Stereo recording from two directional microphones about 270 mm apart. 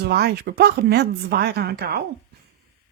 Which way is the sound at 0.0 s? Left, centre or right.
Right.